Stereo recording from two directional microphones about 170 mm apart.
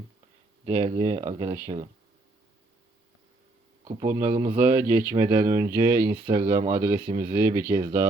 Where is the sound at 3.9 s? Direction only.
40° right (ahead or behind).